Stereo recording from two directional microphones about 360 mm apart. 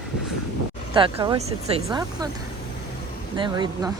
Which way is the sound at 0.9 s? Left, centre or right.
Centre.